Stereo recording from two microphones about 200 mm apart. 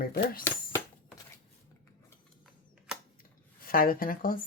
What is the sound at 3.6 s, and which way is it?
Speech, 45° left (ahead or behind).